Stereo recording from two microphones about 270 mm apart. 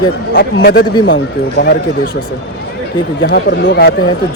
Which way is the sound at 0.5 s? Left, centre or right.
Left.